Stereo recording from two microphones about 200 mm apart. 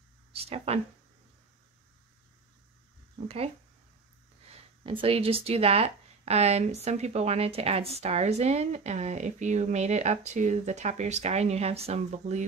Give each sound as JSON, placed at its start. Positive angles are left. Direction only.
{"t": 0.3, "sound": "speech", "side_deg": -30}
{"t": 3.3, "sound": "speech", "side_deg": -30}
{"t": 4.8, "sound": "speech", "side_deg": -30}